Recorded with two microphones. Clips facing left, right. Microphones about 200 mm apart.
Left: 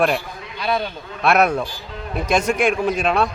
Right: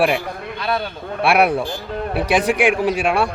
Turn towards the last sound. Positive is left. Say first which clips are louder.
# right 1 dB
turn(degrees=-10)  # may be behind; listen again after turning